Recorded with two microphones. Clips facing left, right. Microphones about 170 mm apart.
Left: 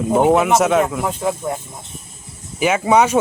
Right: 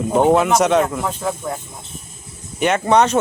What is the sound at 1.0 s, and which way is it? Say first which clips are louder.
Speech: left 2 dB; 20° left (ahead or behind).